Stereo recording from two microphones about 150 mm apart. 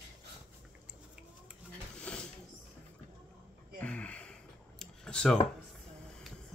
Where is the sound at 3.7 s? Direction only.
10° left (ahead or behind).